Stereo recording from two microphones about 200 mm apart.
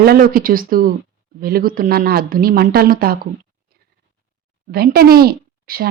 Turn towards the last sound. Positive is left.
turn(degrees=-50)  # may be behind; listen again after turning